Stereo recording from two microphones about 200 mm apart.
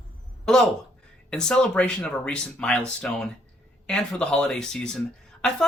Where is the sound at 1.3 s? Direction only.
5° left (ahead or behind).